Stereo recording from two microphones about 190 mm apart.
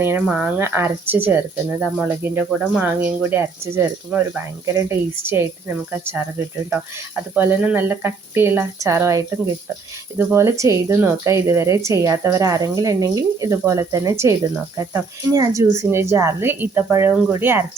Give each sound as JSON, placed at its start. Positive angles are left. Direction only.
{"t": 0.0, "sound": "speech", "side_deg": -10}
{"t": 7.3, "sound": "speech", "side_deg": -10}